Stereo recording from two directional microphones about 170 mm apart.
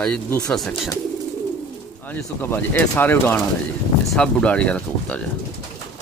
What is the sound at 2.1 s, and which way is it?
Speech, 10° left (ahead or behind).